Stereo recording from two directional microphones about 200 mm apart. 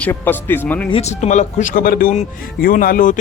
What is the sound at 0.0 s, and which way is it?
Speech, 10° left (ahead or behind).